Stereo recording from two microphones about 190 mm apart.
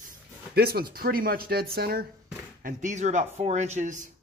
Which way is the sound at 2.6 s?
45° right (ahead or behind).